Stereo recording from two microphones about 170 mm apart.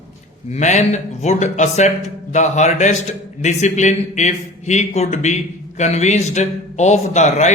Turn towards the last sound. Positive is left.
turn(degrees=45)  # may be behind; listen again after turning